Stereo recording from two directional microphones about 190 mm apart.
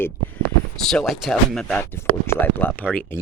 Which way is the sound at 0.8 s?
Centre (ahead or behind).